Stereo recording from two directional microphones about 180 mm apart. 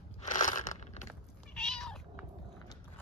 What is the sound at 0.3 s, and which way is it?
Crunch, 45° left (ahead or behind).